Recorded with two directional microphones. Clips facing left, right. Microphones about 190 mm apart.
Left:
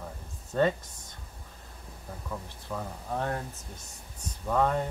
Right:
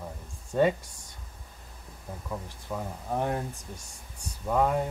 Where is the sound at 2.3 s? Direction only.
15° right (ahead or behind).